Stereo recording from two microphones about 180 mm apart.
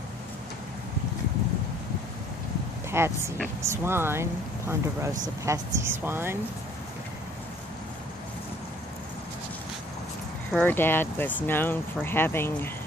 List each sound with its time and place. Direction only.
2.9 s speech: 15° right (ahead or behind)
10.5 s speech: 10° left (ahead or behind)